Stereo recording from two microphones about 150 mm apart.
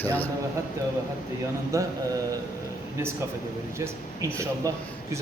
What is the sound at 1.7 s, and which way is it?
Speech, 20° right (ahead or behind).